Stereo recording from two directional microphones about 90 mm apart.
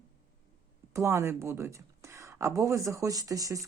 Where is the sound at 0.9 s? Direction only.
35° right (ahead or behind).